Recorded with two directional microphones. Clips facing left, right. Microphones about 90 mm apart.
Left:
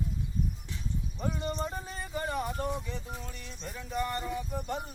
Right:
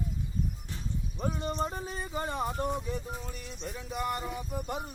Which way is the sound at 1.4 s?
5° right (ahead or behind).